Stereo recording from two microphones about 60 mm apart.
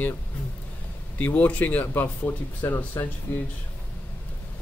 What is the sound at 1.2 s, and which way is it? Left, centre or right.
Speech, left.